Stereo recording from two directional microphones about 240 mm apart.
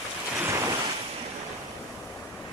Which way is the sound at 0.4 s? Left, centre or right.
Centre.